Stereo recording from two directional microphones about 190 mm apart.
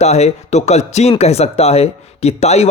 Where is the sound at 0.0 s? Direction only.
35° left (ahead or behind).